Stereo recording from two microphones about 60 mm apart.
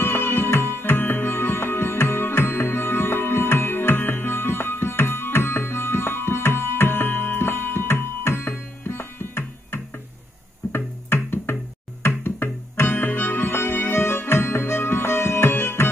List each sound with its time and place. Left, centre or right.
0.0 s music: left